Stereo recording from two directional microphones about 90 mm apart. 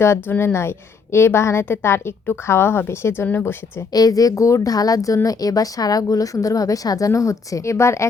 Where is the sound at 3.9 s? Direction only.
45° left (ahead or behind).